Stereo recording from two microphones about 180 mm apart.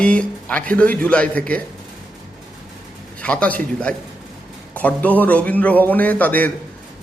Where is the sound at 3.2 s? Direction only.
5° left (ahead or behind).